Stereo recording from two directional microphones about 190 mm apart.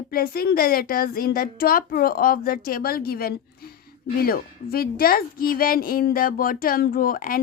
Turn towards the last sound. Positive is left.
turn(degrees=50)  # may be behind; listen again after turning